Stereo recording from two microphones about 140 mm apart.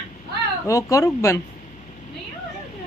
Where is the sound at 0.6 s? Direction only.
25° left (ahead or behind).